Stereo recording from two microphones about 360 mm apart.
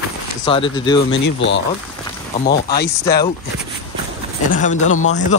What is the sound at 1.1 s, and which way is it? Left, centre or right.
Speech, left.